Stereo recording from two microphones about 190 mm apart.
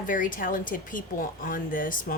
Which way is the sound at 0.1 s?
45° left (ahead or behind).